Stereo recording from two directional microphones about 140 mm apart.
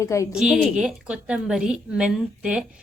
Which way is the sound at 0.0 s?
20° left (ahead or behind).